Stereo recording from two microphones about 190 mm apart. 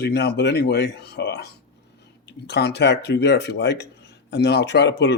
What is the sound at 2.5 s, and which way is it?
Speech, 60° left (ahead or behind).